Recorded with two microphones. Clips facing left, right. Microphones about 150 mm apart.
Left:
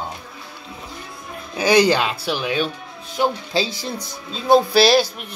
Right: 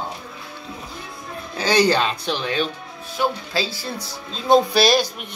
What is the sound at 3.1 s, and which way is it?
Speech, 20° left (ahead or behind).